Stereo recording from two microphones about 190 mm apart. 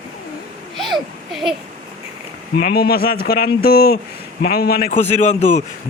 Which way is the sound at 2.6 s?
50° left (ahead or behind).